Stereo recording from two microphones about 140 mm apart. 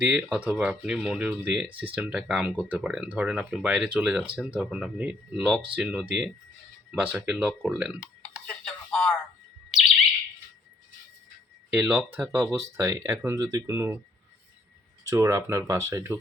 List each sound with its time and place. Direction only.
0.0 s speech: 10° right (ahead or behind)
8.4 s music: 5° left (ahead or behind)
11.7 s speech: 10° right (ahead or behind)
15.0 s speech: 20° right (ahead or behind)